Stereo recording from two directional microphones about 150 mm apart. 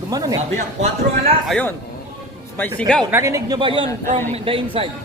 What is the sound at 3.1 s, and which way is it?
Speech, 20° right (ahead or behind).